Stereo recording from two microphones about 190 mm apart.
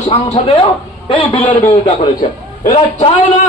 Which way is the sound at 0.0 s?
35° left (ahead or behind).